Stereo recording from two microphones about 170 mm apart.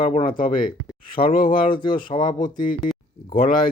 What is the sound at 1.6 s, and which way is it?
Speech, 30° left (ahead or behind).